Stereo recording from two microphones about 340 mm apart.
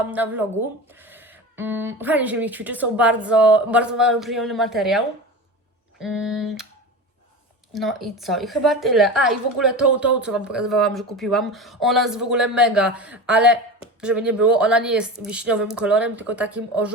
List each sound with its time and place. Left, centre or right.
0.1 s a woman's voice: centre
7.7 s a woman's voice: centre